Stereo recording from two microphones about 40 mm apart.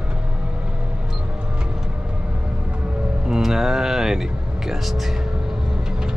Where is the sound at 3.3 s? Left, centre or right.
Centre.